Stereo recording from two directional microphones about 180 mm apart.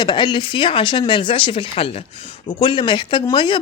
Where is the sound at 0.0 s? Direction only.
25° left (ahead or behind).